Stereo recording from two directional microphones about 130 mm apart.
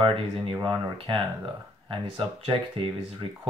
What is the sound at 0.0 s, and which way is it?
Speech, 40° right (ahead or behind).